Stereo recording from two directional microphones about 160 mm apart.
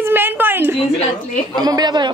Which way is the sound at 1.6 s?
25° right (ahead or behind).